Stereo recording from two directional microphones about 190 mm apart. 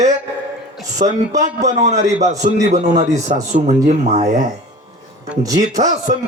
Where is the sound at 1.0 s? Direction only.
50° right (ahead or behind).